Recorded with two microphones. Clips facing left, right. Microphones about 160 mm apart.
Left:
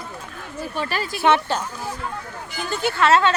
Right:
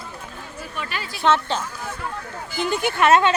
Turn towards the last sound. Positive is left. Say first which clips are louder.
# right 1 dB
turn(degrees=-15)  # may be behind; listen again after turning